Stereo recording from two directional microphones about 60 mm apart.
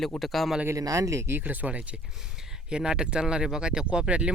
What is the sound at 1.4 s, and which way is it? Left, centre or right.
Speech, right.